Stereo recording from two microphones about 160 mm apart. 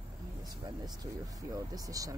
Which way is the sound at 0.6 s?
25° right (ahead or behind).